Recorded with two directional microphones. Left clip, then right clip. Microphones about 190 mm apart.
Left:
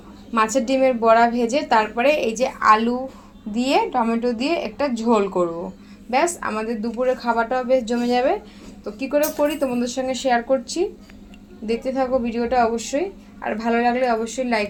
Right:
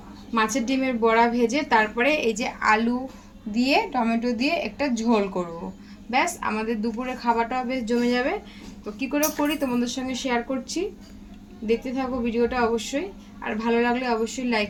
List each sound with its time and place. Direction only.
0.3 s a woman's voice: 15° left (ahead or behind)
6.4 s a woman's voice: 10° left (ahead or behind)